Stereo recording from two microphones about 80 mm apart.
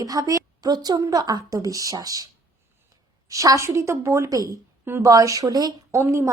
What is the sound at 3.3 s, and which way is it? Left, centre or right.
A woman's voice, right.